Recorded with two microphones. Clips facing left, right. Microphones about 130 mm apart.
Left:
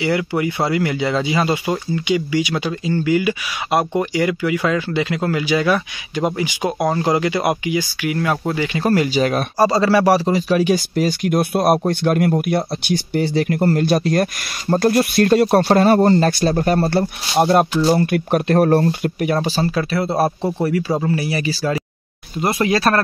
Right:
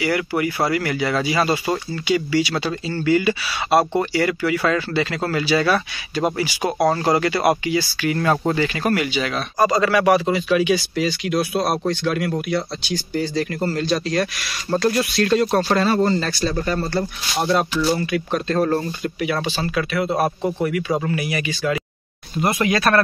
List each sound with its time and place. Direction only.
0.0 s speech: 20° left (ahead or behind); by 8.6 s 5° left (ahead or behind)
8.6 s speech: 20° left (ahead or behind)
8.9 s speech: 35° left (ahead or behind)
9.6 s speech: 30° left (ahead or behind); by 19.3 s 50° left (ahead or behind)
19.4 s speech: 35° left (ahead or behind)